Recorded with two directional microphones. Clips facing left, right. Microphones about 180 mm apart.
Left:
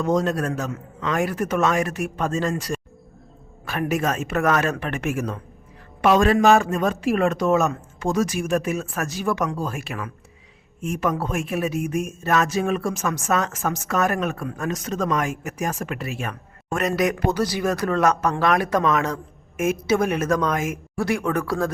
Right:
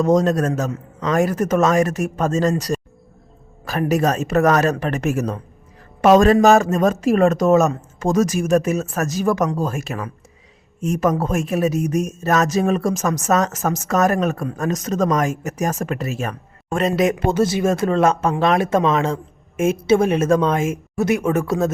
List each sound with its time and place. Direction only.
0.0 s speech: 40° right (ahead or behind)
16.7 s speech: 25° right (ahead or behind)